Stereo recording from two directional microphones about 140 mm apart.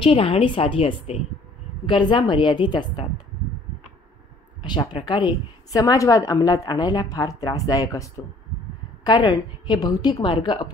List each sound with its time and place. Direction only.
0.0 s a woman's voice: 40° left (ahead or behind)
4.6 s a woman's voice: 35° left (ahead or behind)